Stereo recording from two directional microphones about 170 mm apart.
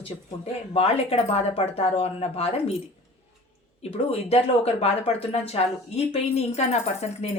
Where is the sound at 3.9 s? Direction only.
35° left (ahead or behind).